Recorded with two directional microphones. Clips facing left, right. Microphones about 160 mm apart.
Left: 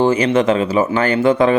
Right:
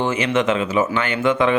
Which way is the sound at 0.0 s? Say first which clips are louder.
Left 5 dB; 35° left (ahead or behind).